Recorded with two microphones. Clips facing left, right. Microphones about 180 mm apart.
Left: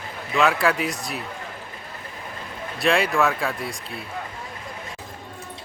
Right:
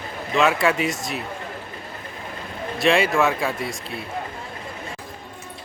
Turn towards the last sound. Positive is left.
turn(degrees=0)  # may be behind; listen again after turning